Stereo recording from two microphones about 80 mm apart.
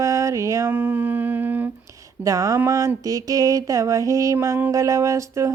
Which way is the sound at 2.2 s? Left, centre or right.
Right.